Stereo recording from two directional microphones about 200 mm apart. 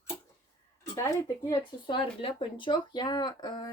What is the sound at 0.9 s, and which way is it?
Speech, 15° left (ahead or behind).